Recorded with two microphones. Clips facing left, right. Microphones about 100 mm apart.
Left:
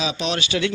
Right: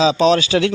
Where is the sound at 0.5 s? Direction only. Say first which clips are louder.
Right 6 dB; 65° right (ahead or behind).